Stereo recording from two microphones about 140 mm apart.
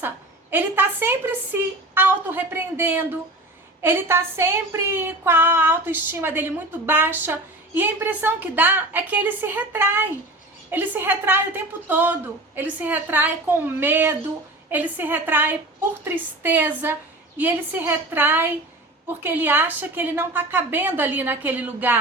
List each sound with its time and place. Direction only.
0.5 s a woman's voice: 15° right (ahead or behind)